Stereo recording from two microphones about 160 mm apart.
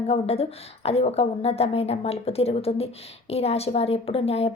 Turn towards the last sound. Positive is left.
turn(degrees=40)  # may be behind; listen again after turning